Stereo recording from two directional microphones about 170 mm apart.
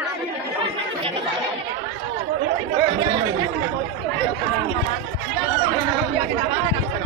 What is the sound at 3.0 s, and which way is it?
Chatter, 25° right (ahead or behind).